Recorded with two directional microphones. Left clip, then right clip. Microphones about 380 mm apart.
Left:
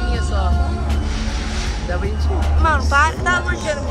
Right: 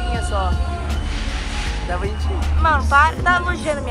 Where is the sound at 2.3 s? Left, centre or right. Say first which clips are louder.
Right 1 dB; centre.